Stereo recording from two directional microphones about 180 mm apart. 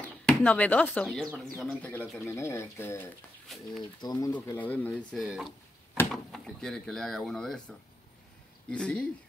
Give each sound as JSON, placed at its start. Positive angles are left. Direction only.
{"t": 0.3, "sound": "speech", "side_deg": 10}
{"t": 3.4, "sound": "a woman's voice", "side_deg": 0}
{"t": 4.0, "sound": "a woman's voice", "side_deg": 20}